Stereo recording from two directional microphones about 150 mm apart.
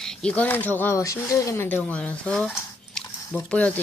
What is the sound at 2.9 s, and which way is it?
Drip, 10° left (ahead or behind).